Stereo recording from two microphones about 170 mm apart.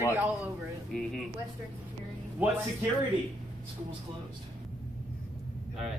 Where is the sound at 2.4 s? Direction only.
10° right (ahead or behind).